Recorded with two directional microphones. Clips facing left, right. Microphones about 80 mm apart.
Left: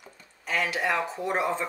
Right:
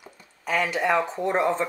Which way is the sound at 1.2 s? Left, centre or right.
Right.